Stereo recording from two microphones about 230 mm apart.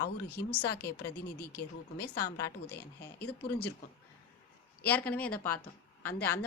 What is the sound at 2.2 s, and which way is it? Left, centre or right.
Speech, centre.